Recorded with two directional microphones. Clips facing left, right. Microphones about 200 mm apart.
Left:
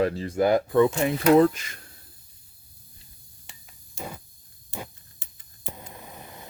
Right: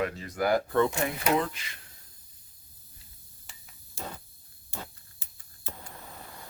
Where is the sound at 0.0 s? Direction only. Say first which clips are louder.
Left 7 dB; 30° left (ahead or behind).